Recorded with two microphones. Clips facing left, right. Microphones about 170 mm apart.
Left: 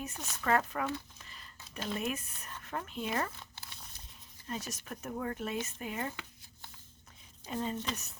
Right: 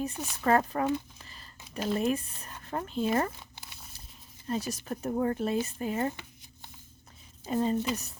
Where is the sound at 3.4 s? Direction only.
15° right (ahead or behind).